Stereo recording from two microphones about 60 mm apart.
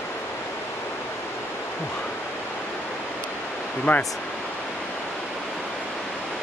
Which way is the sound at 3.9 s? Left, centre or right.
Left.